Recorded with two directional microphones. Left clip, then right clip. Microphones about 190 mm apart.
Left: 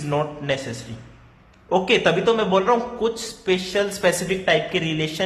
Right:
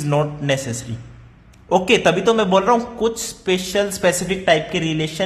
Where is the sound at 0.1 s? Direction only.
25° right (ahead or behind).